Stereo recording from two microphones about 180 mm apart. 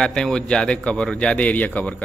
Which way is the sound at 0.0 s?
5° left (ahead or behind).